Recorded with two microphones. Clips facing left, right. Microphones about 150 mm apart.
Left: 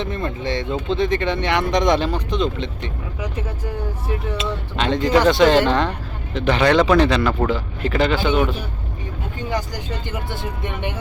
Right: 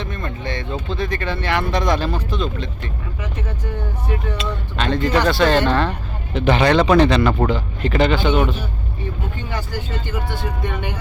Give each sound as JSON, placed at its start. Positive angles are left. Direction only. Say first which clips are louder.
{"t": 0.0, "sound": "speech", "louder": "left 3 dB", "side_deg": 25}
{"t": 4.4, "sound": "speech", "louder": "left 1 dB", "side_deg": 20}
{"t": 6.3, "sound": "speech", "louder": "right 1 dB", "side_deg": -5}
{"t": 9.5, "sound": "speech", "louder": "left 3 dB", "side_deg": 15}